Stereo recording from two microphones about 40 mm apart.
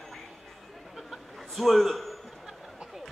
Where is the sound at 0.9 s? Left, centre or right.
Centre.